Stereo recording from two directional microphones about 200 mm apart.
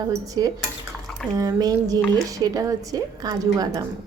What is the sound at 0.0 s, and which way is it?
A woman's voice, 15° right (ahead or behind).